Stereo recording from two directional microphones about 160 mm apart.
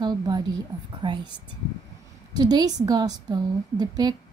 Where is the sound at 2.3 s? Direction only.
25° right (ahead or behind).